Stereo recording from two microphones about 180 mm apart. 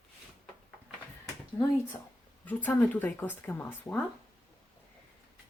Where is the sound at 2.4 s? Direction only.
10° left (ahead or behind).